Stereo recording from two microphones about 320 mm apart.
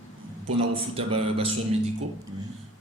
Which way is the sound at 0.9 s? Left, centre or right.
Centre.